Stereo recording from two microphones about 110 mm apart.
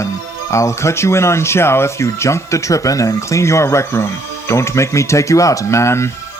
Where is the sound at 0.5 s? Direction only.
25° left (ahead or behind).